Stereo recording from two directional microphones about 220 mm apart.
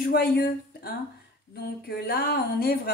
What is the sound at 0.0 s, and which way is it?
Speech, 45° left (ahead or behind).